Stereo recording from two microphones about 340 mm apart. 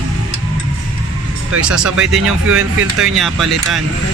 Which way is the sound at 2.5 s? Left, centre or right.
Right.